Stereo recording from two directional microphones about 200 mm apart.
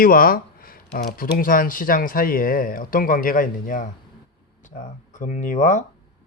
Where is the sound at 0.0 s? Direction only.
45° left (ahead or behind).